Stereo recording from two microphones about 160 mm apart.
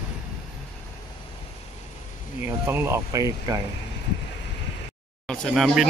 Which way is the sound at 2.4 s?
15° right (ahead or behind).